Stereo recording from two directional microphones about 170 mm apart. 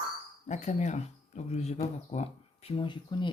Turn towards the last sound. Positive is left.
turn(degrees=25)  # may be behind; listen again after turning